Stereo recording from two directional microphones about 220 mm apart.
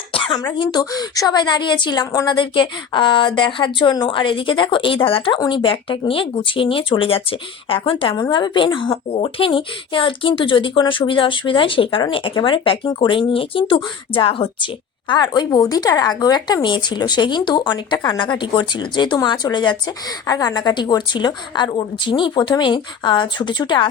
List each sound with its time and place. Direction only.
0.1 s speech: 20° left (ahead or behind)